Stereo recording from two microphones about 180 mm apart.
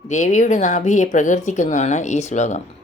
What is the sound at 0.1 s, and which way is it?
Speech, 40° left (ahead or behind).